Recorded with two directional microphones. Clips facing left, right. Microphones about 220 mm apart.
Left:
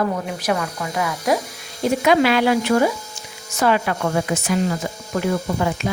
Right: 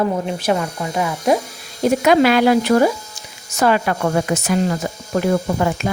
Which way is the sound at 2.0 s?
45° right (ahead or behind).